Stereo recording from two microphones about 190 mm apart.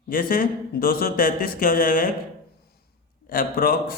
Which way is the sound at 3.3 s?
50° left (ahead or behind).